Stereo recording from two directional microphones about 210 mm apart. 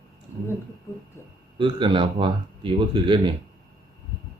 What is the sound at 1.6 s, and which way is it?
Speech, 20° right (ahead or behind).